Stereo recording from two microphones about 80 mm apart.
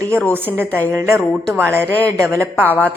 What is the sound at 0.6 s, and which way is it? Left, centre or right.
Speech, right.